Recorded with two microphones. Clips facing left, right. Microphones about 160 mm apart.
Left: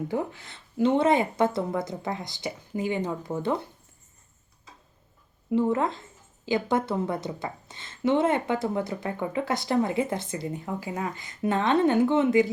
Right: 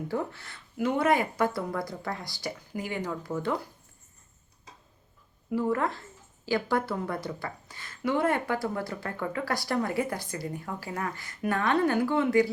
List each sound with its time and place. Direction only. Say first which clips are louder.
0.1 s a woman's voice: left 2 dB; 20° left (ahead or behind)
5.5 s a woman's voice: left 3 dB; 25° left (ahead or behind)